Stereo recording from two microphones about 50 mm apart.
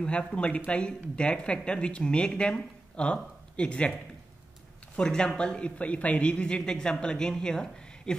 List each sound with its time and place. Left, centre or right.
0.0 s speech: left
4.9 s speech: centre